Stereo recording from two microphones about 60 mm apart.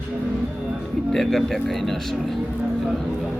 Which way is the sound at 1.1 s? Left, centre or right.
Centre.